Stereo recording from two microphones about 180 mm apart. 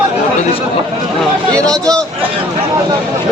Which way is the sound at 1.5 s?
5° left (ahead or behind).